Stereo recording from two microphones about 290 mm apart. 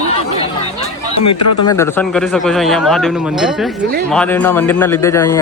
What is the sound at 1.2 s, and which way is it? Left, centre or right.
Speech, left.